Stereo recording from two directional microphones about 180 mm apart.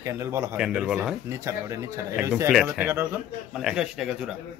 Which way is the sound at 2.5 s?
5° right (ahead or behind).